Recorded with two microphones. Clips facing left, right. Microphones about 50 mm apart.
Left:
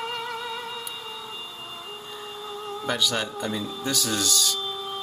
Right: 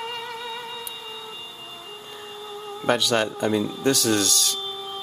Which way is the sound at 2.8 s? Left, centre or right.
Right.